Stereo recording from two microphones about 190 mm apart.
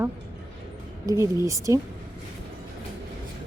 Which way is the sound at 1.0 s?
15° right (ahead or behind).